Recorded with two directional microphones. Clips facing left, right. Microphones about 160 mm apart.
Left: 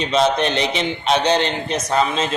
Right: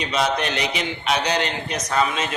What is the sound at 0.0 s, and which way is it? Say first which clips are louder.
A man's voice: left 5 dB; 25° left (ahead or behind).